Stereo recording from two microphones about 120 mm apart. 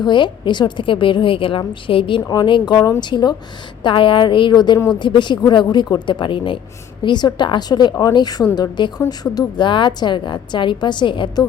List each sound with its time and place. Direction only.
0.0 s a woman's voice: 40° left (ahead or behind)